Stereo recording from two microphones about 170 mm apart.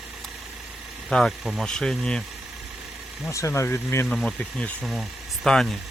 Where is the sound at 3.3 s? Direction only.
15° left (ahead or behind).